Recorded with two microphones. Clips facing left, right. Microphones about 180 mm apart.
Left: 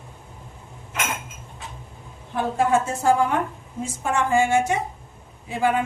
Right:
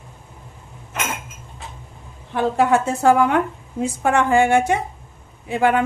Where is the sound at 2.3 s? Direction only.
70° right (ahead or behind).